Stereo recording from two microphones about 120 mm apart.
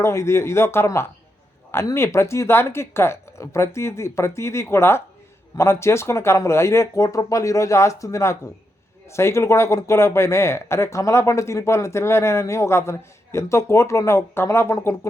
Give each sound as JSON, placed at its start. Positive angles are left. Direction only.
{"t": 0.0, "sound": "speech", "side_deg": 25}